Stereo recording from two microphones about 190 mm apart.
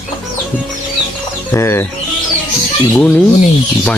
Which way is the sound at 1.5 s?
10° left (ahead or behind).